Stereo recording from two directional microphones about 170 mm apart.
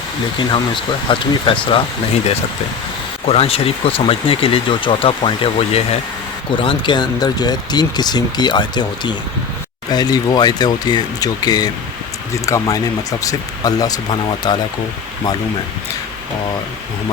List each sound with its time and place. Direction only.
0.3 s speech: 30° left (ahead or behind)
3.2 s speech: 35° left (ahead or behind)